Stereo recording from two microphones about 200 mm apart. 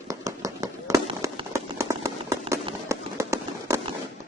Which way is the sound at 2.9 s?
15° right (ahead or behind).